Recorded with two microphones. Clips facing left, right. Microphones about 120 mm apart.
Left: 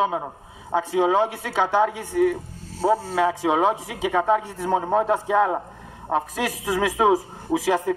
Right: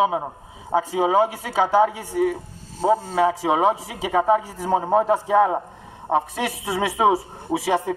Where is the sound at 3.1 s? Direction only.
5° right (ahead or behind).